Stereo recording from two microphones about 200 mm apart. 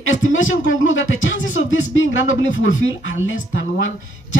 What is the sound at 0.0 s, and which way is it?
A man's voice, 80° left.